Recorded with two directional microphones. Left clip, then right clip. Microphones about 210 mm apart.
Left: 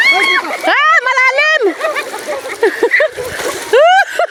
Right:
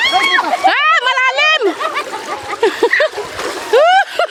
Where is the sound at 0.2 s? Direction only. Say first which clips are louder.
Right 1 dB; 10° left (ahead or behind).